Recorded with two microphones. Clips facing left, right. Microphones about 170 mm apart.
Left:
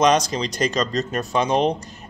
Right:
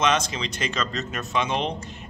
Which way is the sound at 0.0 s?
40° left (ahead or behind).